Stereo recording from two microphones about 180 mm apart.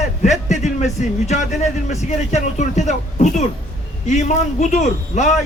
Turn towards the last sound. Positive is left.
turn(degrees=40)  # may be behind; listen again after turning